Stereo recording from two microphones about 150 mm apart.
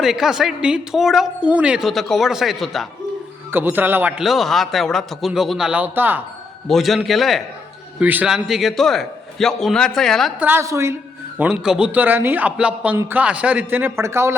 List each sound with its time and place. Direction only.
0.0 s a woman's voice: centre (ahead or behind)
3.5 s a woman's voice: 15° right (ahead or behind)
6.7 s a woman's voice: centre (ahead or behind)
7.9 s a woman's voice: 10° right (ahead or behind)
10.4 s speech: 15° right (ahead or behind)
11.3 s speech: 5° right (ahead or behind)